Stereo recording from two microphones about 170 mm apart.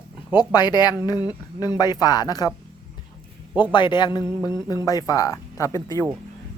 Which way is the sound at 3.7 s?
25° left (ahead or behind).